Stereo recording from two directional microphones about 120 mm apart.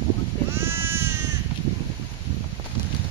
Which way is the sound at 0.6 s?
20° right (ahead or behind).